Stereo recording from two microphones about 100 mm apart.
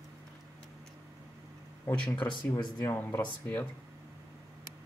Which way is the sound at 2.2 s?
50° left (ahead or behind).